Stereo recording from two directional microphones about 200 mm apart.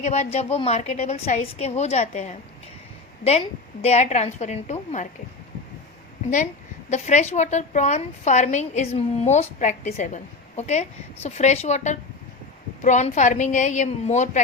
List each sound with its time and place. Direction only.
0.0 s a woman's voice: 35° left (ahead or behind)
6.9 s a woman's voice: 35° left (ahead or behind)